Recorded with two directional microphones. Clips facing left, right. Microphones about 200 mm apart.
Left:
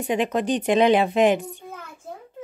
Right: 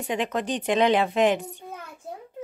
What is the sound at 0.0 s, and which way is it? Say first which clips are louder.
Speech: left 4 dB; 10° left (ahead or behind).